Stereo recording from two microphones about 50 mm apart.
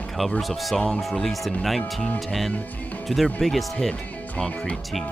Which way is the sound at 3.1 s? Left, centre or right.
Centre.